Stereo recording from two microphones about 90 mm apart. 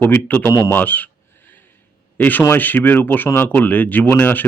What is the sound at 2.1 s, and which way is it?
Speech, 20° left (ahead or behind).